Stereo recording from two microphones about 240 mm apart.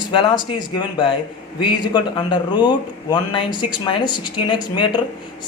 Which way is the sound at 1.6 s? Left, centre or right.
Centre.